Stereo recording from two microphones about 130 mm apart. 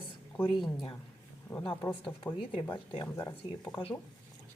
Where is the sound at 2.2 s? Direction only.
40° left (ahead or behind).